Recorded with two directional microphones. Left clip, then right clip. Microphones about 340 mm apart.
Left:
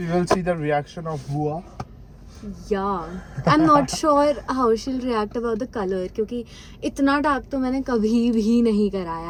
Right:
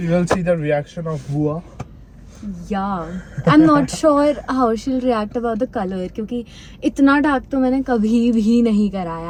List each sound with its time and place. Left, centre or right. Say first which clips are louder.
0.0 s a man's voice: right 3 dB; centre
2.6 s speech: right 1 dB; centre